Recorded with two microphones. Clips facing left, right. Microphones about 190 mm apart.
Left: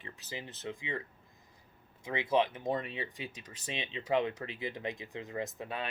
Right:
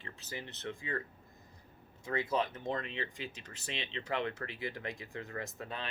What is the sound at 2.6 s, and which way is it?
Speech, 15° left (ahead or behind).